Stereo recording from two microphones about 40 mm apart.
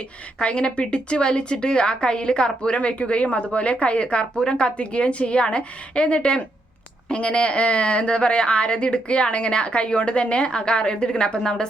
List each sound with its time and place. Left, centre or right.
0.3 s a woman's voice: left